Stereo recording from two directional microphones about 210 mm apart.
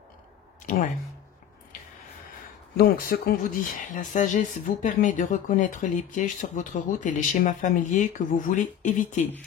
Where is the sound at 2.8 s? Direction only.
45° left (ahead or behind).